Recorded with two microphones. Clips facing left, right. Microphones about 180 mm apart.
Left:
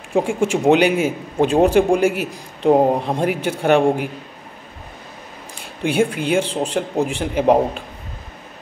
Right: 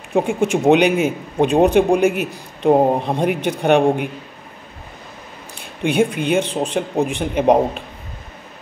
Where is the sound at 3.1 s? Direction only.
10° left (ahead or behind).